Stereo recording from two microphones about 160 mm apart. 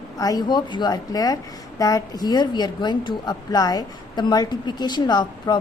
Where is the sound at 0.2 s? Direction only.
25° left (ahead or behind).